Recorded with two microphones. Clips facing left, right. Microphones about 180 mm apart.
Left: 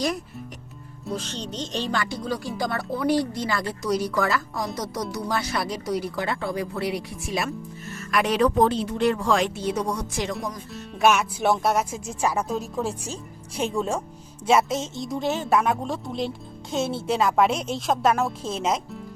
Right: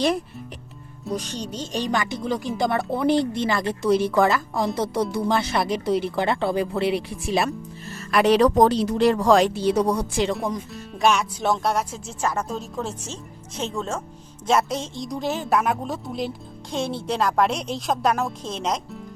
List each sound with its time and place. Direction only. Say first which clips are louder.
1.1 s speech: right 2 dB; 10° right (ahead or behind); by 10.3 s 30° right (ahead or behind)
10.8 s speech: left 1 dB; 5° left (ahead or behind)